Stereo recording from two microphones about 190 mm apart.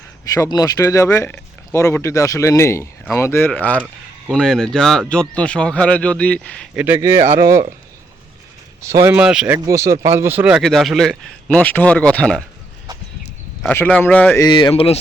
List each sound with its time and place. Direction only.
0.3 s speech: 20° left (ahead or behind)
6.7 s speech: 10° right (ahead or behind)
8.8 s speech: 15° right (ahead or behind)
9.6 s speech: 15° right (ahead or behind); by 12.4 s 5° left (ahead or behind)
13.6 s speech: 10° left (ahead or behind)
14.4 s speech: 25° left (ahead or behind)